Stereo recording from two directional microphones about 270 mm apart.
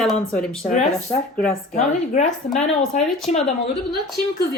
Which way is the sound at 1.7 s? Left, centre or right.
Left.